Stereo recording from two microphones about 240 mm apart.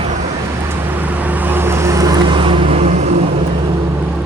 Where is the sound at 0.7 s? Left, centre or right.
Centre; by 3.3 s right.